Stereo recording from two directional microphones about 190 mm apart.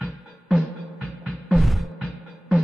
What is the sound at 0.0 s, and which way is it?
Music, centre (ahead or behind).